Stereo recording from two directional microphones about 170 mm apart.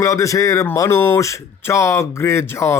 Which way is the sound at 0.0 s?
20° left (ahead or behind).